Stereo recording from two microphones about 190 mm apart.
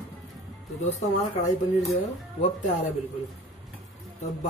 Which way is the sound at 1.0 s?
35° left (ahead or behind).